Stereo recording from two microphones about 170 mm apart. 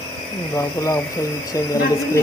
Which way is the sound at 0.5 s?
20° left (ahead or behind).